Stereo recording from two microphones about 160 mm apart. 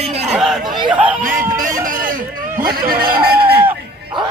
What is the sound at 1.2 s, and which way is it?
Music, 55° right (ahead or behind).